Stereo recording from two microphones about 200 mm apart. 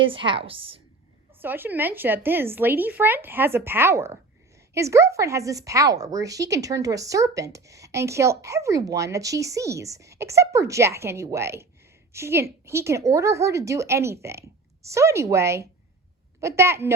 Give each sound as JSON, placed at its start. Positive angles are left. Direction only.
{"t": 0.0, "sound": "a woman's voice", "side_deg": -25}
{"t": 1.4, "sound": "speech", "side_deg": -10}